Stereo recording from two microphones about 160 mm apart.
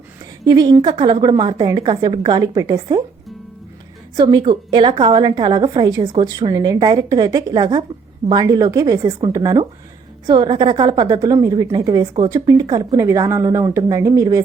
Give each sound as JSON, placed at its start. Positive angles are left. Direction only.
{"t": 0.4, "sound": "a woman's voice", "side_deg": -25}
{"t": 4.2, "sound": "a woman's voice", "side_deg": -25}